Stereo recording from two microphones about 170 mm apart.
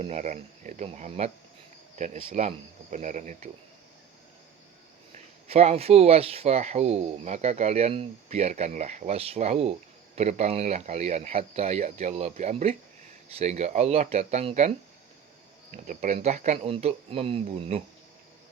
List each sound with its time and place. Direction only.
0.0 s speech: 40° right (ahead or behind)
5.1 s speech: 40° right (ahead or behind)
15.7 s speech: 45° right (ahead or behind)